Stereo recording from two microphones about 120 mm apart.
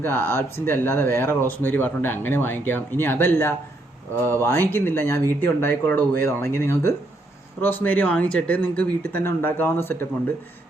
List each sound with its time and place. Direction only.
0.0 s speech: 20° left (ahead or behind)